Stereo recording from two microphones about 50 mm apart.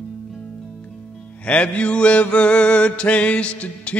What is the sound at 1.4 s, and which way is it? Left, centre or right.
Mantra, left.